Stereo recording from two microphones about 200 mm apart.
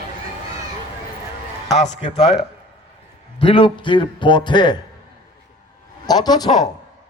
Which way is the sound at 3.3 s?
25° left (ahead or behind).